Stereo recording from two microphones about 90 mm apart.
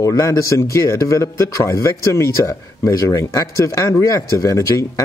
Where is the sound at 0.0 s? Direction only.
35° left (ahead or behind).